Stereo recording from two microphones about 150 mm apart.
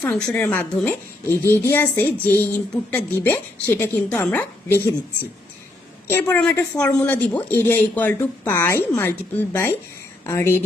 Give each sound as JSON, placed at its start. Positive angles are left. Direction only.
{"t": 0.0, "sound": "speech", "side_deg": 10}
{"t": 6.1, "sound": "speech", "side_deg": 15}